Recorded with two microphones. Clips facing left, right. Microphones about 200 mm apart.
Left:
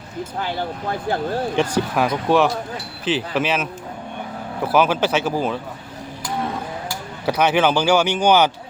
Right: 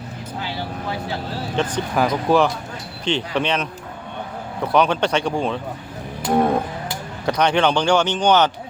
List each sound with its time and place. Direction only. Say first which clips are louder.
0.3 s speech: left 2 dB; 50° left (ahead or behind)
1.5 s speech: right 1 dB; 5° left (ahead or behind)
7.3 s speech: even; 5° left (ahead or behind)